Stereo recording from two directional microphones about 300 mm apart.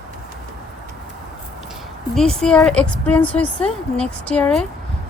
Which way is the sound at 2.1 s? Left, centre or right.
Centre.